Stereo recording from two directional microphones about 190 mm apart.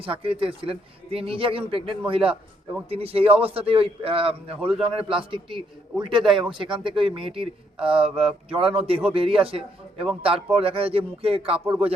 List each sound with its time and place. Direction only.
0.0 s a man's voice: 30° right (ahead or behind)
11.6 s speech: 10° right (ahead or behind)